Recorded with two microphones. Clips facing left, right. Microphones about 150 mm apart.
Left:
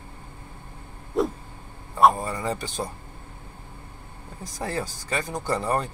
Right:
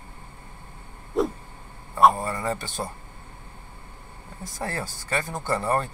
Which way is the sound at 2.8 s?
5° left (ahead or behind).